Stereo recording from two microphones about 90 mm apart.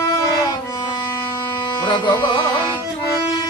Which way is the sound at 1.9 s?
60° left (ahead or behind).